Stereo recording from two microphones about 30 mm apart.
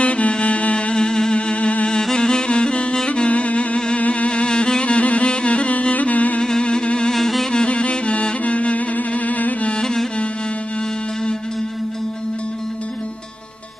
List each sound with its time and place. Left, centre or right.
0.0 s music: left
0.9 s music: left
1.4 s music: left
2.1 s music: left
3.2 s music: left
4.3 s music: left
6.4 s music: left
7.1 s music: centre
7.5 s music: left
9.8 s music: centre